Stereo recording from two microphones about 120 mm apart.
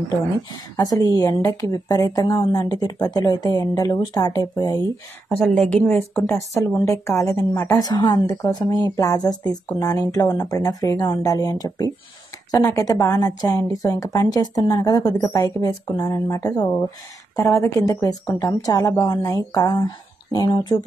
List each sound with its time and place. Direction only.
0.7 s a woman's voice: 30° left (ahead or behind)
5.3 s a woman's voice: 10° left (ahead or behind)
6.1 s a woman's voice: 25° left (ahead or behind)